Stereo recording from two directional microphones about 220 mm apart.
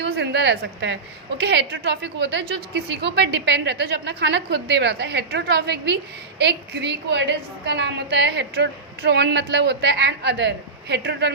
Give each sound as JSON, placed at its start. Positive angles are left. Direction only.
{"t": 0.0, "sound": "a woman's voice", "side_deg": -50}